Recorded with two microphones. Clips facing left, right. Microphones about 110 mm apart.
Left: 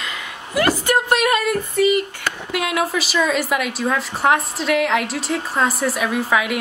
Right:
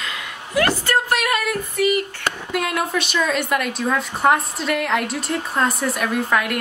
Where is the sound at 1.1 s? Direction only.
25° left (ahead or behind).